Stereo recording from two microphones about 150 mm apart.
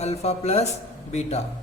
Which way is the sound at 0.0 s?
45° left (ahead or behind).